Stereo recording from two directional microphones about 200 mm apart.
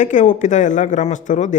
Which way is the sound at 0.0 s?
40° left (ahead or behind).